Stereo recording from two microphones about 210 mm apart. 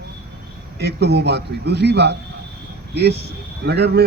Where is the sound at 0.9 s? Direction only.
55° right (ahead or behind).